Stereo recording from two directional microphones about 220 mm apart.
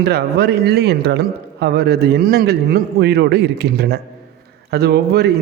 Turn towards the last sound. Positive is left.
turn(degrees=-45)  # may be behind; listen again after turning